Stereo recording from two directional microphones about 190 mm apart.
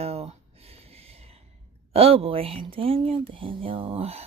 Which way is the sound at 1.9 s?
30° right (ahead or behind).